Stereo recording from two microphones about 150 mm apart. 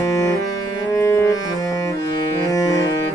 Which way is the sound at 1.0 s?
20° left (ahead or behind).